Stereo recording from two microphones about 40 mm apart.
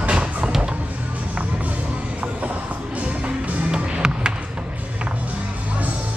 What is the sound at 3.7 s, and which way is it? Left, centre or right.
Music, centre.